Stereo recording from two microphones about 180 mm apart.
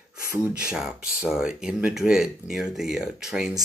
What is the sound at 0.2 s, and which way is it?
Speech, 15° right (ahead or behind).